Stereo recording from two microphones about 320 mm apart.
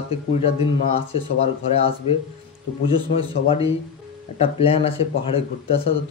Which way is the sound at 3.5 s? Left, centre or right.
Centre.